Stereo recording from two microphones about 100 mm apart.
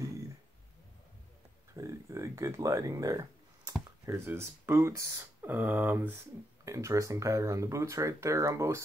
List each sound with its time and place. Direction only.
1.7 s a sound: 30° right (ahead or behind)
4.0 s speech: 25° right (ahead or behind)
6.6 s speech: 30° right (ahead or behind)